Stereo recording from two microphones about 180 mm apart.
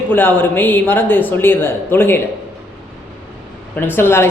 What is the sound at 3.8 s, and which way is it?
Speech, 10° left (ahead or behind).